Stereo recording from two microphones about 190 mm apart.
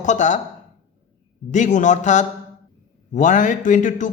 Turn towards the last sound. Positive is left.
turn(degrees=40)  # may be behind; listen again after turning